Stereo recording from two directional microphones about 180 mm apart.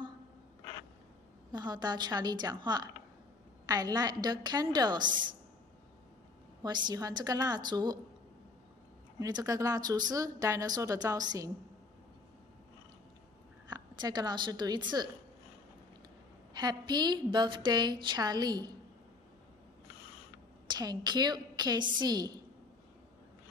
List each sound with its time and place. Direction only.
1.5 s speech: 25° right (ahead or behind)
6.6 s speech: 25° right (ahead or behind)
9.2 s speech: 20° right (ahead or behind)
13.7 s a woman's voice: 20° right (ahead or behind)
16.5 s speech: 25° right (ahead or behind)
20.6 s speech: 25° right (ahead or behind)